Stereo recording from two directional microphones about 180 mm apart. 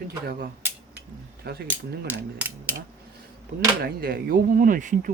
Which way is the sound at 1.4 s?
65° right (ahead or behind).